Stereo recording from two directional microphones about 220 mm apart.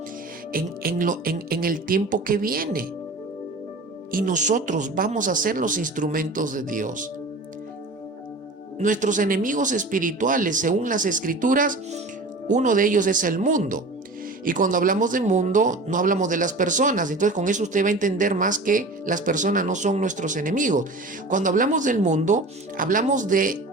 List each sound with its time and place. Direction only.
0.5 s speech: 40° right (ahead or behind)
4.1 s speech: 35° right (ahead or behind)
8.8 s speech: 35° right (ahead or behind)